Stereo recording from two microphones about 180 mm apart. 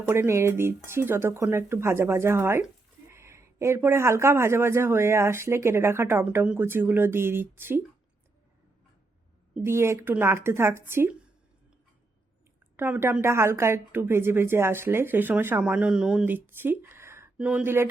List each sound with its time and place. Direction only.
0.1 s a woman's voice: 15° right (ahead or behind)
9.6 s a woman's voice: 15° right (ahead or behind)
12.7 s a woman's voice: 10° right (ahead or behind)